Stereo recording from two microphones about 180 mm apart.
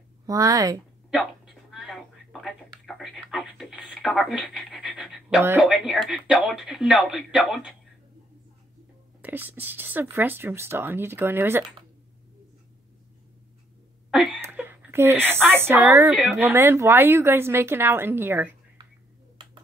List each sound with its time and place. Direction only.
0.3 s a woman's voice: 20° right (ahead or behind)
1.1 s a sound: centre (ahead or behind)
5.6 s speech: centre (ahead or behind)
9.2 s a woman's voice: 10° right (ahead or behind)
14.1 s speech: centre (ahead or behind)
14.4 s a woman's voice: 10° right (ahead or behind)
16.1 s speech: centre (ahead or behind)
16.3 s a woman's voice: 15° right (ahead or behind)